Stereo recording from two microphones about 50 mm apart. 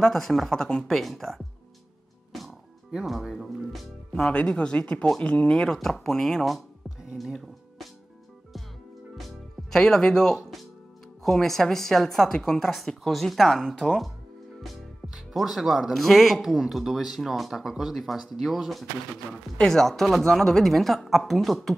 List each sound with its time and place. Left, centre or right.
0.0 s speech: centre
3.3 s music: centre
4.2 s speech: left
5.7 s a woman's voice: centre
9.1 s music: centre
11.2 s a woman's voice: centre
14.6 s speech: centre